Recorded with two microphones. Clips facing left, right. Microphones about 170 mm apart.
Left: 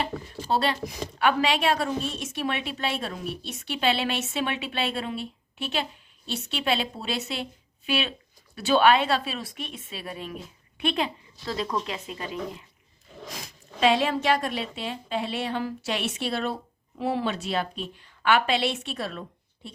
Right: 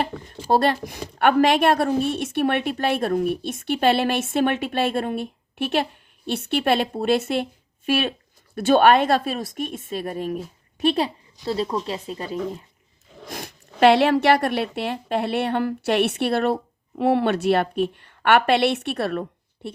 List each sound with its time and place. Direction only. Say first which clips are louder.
0.5 s a woman's voice: right 6 dB; 55° right (ahead or behind); by 12.6 s 35° right (ahead or behind)
13.2 s speech: right 6 dB; 60° right (ahead or behind)